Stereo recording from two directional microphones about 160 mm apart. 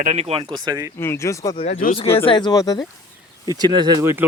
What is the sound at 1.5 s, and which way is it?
Speech, 40° left (ahead or behind).